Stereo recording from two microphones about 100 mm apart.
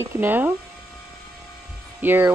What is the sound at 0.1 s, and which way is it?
Speech, 20° right (ahead or behind).